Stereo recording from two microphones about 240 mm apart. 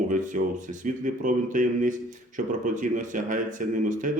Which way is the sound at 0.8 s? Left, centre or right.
Right.